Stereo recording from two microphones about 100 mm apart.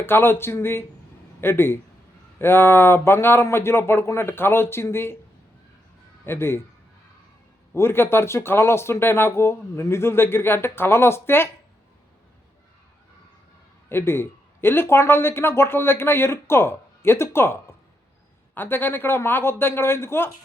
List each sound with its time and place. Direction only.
0.0 s speech: 25° left (ahead or behind)
6.2 s speech: 25° left (ahead or behind)
7.7 s speech: 25° left (ahead or behind)
13.9 s speech: 25° left (ahead or behind)